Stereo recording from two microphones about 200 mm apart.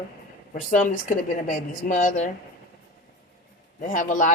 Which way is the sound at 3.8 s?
40° left (ahead or behind).